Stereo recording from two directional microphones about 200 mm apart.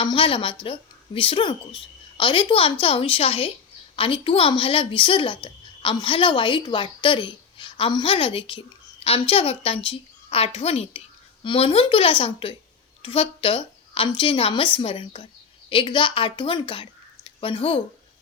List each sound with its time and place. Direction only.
0.0 s a woman's voice: 25° left (ahead or behind)